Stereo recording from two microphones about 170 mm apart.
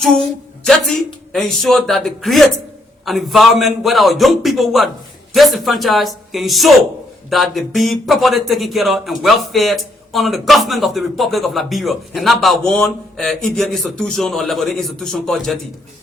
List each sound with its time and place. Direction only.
0.0 s speech: 5° left (ahead or behind)